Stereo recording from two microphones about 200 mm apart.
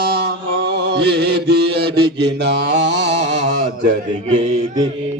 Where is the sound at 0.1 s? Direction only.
55° right (ahead or behind).